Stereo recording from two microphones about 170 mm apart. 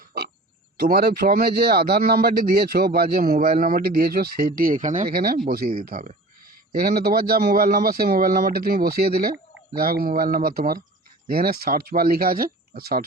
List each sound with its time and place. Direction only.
0.8 s speech: 65° right (ahead or behind)
6.7 s speech: 60° right (ahead or behind)